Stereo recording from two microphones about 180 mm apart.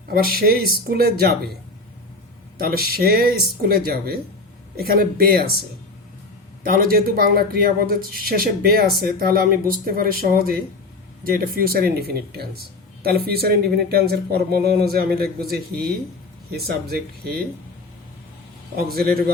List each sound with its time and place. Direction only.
0.3 s speech: 55° right (ahead or behind)
2.6 s speech: 55° right (ahead or behind)
6.6 s speech: 55° right (ahead or behind)
16.6 s speech: 60° right (ahead or behind)
18.9 s speech: 55° right (ahead or behind)